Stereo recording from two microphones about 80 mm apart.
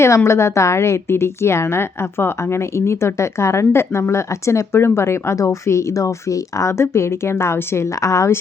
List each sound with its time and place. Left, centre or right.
0.0 s a woman's voice: left